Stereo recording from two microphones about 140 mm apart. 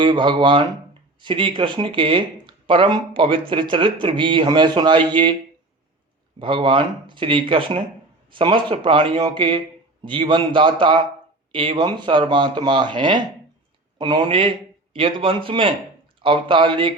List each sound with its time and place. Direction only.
0.0 s speech: 35° right (ahead or behind)
6.4 s speech: 35° right (ahead or behind)